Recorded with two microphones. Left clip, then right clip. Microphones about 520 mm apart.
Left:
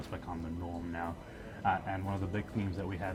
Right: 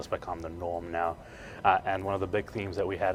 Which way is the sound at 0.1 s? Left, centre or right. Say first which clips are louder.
Right 13 dB; right.